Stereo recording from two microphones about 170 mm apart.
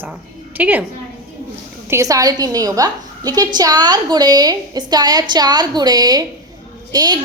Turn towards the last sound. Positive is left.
turn(degrees=-25)  # may be behind; listen again after turning